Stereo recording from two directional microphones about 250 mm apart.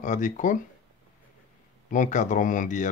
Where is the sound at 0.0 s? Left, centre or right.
Left.